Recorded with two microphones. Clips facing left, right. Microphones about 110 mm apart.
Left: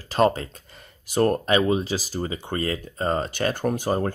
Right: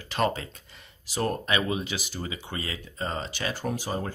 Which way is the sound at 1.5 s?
35° left (ahead or behind).